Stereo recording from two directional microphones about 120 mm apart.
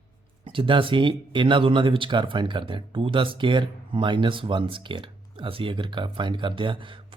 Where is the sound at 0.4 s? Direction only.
45° right (ahead or behind).